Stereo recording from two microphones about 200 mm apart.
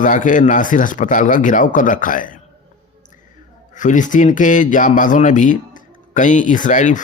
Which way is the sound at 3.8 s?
40° left (ahead or behind).